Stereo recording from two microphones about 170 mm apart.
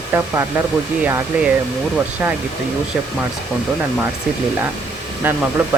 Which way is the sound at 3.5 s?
5° right (ahead or behind).